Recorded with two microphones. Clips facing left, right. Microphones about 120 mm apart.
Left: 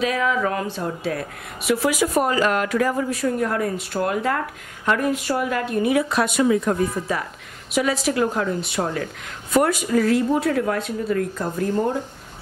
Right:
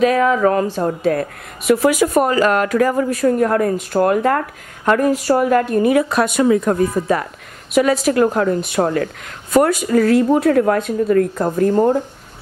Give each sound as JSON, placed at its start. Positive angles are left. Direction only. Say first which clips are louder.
{"t": 0.0, "sound": "a woman's voice", "louder": "right 8 dB", "side_deg": -50}